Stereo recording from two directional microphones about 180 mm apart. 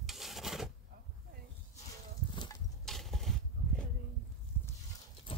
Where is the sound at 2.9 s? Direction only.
Centre (ahead or behind).